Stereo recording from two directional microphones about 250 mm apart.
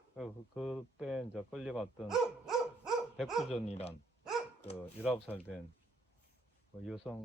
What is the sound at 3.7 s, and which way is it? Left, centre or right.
Speech, left.